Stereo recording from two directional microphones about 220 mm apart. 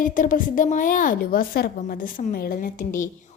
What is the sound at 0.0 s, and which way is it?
A woman's voice, 35° left (ahead or behind).